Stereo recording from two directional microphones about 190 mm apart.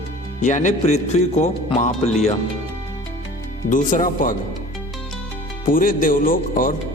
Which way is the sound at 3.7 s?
45° left (ahead or behind).